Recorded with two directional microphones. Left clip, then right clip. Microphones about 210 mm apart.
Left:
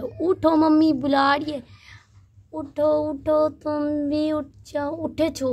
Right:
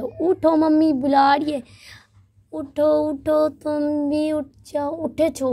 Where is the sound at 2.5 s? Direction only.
25° right (ahead or behind).